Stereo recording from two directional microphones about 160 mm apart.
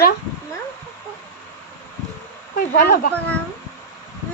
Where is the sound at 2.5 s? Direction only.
75° left (ahead or behind).